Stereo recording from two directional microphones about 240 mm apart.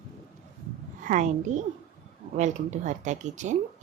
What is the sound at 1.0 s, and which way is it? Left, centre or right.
A woman's voice, right.